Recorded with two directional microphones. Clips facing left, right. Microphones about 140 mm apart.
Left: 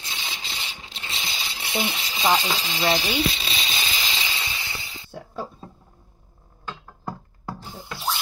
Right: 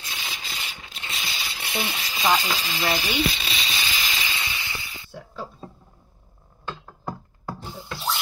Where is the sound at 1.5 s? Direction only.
15° left (ahead or behind).